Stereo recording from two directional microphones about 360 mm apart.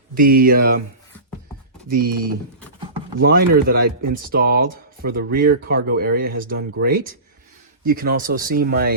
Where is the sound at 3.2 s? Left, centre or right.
Right.